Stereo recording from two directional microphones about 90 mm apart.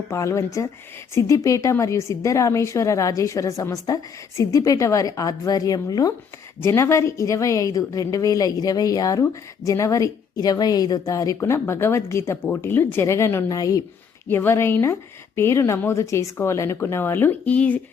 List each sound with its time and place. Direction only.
0.1 s a woman's voice: 35° left (ahead or behind)
6.6 s a woman's voice: 30° left (ahead or behind)
11.3 s a woman's voice: 30° left (ahead or behind)
14.3 s a woman's voice: 25° left (ahead or behind)